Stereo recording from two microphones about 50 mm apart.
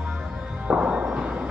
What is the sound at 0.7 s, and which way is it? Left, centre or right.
Music, centre.